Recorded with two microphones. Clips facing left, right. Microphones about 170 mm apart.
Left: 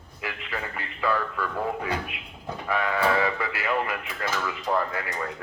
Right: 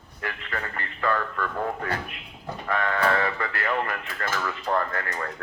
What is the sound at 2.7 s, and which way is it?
Speech, 5° left (ahead or behind).